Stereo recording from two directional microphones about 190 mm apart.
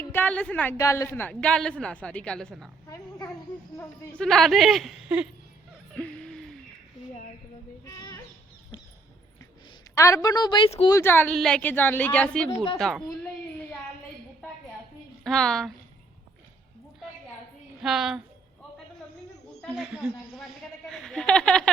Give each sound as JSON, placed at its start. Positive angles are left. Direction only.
{"t": 0.1, "sound": "a woman's voice", "side_deg": 10}
{"t": 3.8, "sound": "speech", "side_deg": 10}
{"t": 5.9, "sound": "a sound", "side_deg": 5}
{"t": 9.9, "sound": "speech", "side_deg": 15}
{"t": 10.9, "sound": "a woman's voice", "side_deg": 10}
{"t": 13.1, "sound": "a sound", "side_deg": 10}
{"t": 15.2, "sound": "a woman's voice", "side_deg": 5}
{"t": 17.8, "sound": "speech", "side_deg": 0}
{"t": 19.7, "sound": "a sound", "side_deg": -5}